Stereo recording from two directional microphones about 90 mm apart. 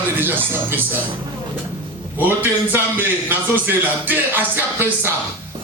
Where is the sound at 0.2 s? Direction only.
25° right (ahead or behind).